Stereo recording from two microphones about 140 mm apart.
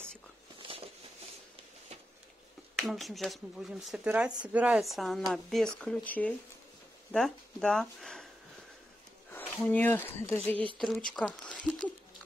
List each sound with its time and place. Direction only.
0.6 s a sound: 40° right (ahead or behind)
2.8 s speech: centre (ahead or behind)
9.7 s speech: 10° left (ahead or behind)